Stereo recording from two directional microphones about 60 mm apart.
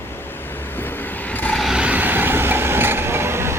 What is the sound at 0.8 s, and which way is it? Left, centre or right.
Vehicle, left.